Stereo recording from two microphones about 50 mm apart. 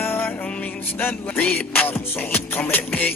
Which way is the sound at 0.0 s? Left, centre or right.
Left.